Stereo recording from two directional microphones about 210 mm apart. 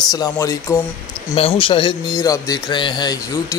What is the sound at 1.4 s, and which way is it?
A man's voice, 25° left (ahead or behind).